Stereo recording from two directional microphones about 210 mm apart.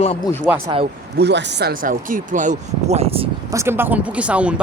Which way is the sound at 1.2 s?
55° right (ahead or behind).